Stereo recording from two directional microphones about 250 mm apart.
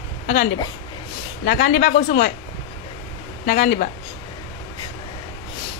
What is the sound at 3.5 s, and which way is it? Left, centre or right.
Speech, left.